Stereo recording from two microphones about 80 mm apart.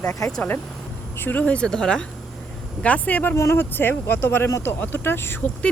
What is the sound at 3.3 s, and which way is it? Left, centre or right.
Speech, left.